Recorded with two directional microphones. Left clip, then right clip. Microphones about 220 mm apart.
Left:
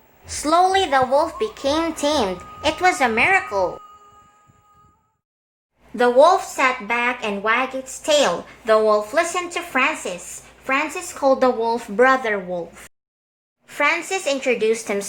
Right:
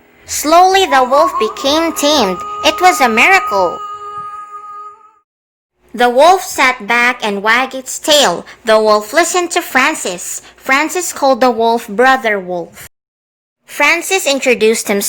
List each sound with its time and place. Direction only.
0.3 s a woman's voice: 35° right (ahead or behind)
6.0 s a woman's voice: 35° right (ahead or behind)